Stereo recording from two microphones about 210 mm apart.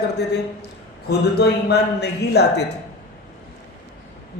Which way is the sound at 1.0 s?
50° left (ahead or behind).